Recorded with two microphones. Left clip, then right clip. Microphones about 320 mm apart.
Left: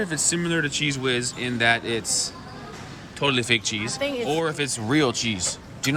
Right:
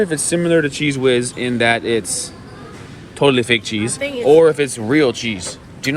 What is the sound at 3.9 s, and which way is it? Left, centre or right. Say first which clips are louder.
Speech: right 3 dB; left.